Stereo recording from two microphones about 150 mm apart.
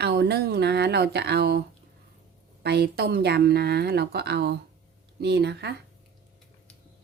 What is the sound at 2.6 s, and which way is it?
Speech, 90° right.